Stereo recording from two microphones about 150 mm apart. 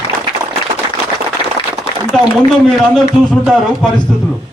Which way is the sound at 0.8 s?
30° right (ahead or behind).